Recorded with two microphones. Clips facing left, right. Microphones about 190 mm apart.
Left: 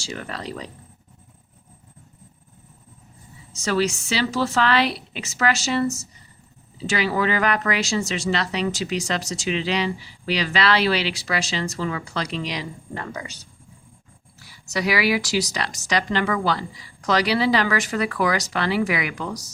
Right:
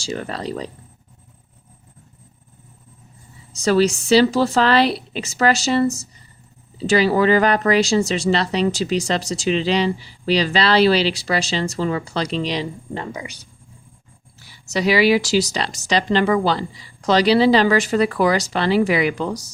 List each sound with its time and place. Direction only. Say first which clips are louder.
0.0 s speech: right 6 dB; 35° right (ahead or behind)
3.5 s speech: right 6 dB; 35° right (ahead or behind); by 13.3 s 20° right (ahead or behind)
14.3 s speech: right 4 dB; 25° right (ahead or behind)